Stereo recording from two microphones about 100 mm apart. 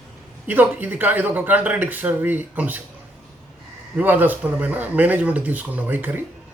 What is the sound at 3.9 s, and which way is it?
A man's voice, 20° right (ahead or behind).